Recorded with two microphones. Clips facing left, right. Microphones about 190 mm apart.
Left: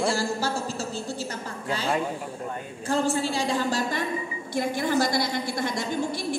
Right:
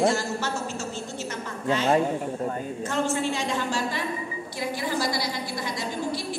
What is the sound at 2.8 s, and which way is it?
A woman's voice, 35° left (ahead or behind).